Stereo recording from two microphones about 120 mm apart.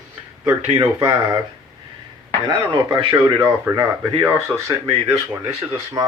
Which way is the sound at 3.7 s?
25° right (ahead or behind).